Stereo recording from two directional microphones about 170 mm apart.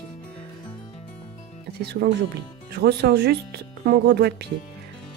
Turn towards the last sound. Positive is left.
turn(degrees=-75)  # may be behind; listen again after turning